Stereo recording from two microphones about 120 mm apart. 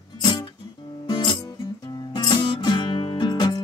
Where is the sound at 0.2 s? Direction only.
35° left (ahead or behind).